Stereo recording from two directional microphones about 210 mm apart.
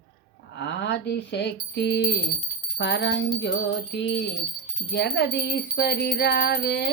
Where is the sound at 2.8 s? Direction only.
55° left (ahead or behind).